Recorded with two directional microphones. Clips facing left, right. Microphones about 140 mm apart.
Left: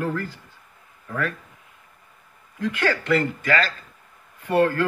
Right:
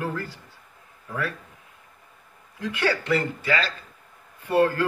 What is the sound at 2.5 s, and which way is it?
Speech, 20° right (ahead or behind).